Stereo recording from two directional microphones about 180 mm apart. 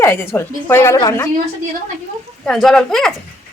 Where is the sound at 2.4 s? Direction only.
Centre (ahead or behind).